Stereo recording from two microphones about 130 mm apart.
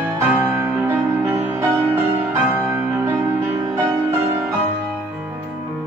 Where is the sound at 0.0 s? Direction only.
15° right (ahead or behind).